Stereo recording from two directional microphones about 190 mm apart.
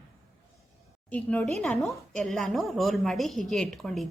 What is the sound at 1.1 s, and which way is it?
A woman's voice, 10° left (ahead or behind).